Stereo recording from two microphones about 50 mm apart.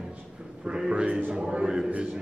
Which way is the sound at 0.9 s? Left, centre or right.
Right.